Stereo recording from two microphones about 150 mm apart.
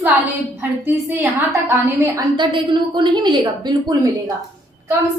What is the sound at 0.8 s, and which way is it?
A woman's voice, 15° right (ahead or behind).